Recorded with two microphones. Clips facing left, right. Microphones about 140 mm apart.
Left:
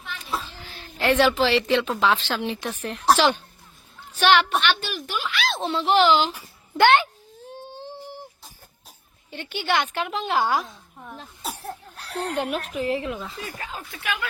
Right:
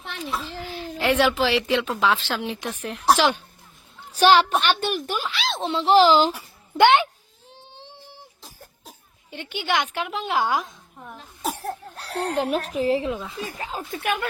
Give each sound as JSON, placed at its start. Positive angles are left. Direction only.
{"t": 0.0, "sound": "a sound", "side_deg": -70}
{"t": 0.6, "sound": "a sound", "side_deg": -10}
{"t": 1.4, "sound": "a woman's voice", "side_deg": -10}
{"t": 4.1, "sound": "a woman's voice", "side_deg": -35}
{"t": 4.6, "sound": "a woman's voice", "side_deg": -50}
{"t": 5.1, "sound": "a child's voice", "side_deg": -35}
{"t": 6.7, "sound": "a woman's voice", "side_deg": -15}
{"t": 9.3, "sound": "a woman's voice", "side_deg": -15}
{"t": 11.4, "sound": "speech", "side_deg": -40}
{"t": 13.9, "sound": "a woman's voice", "side_deg": -50}